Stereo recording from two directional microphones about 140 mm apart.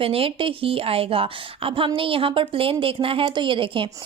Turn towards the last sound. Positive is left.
turn(degrees=-40)  # may be behind; listen again after turning